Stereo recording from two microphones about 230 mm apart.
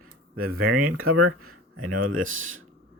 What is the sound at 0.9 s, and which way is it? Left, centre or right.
Speech, right.